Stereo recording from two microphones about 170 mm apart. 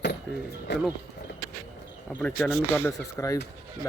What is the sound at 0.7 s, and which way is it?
Speech, 90° left.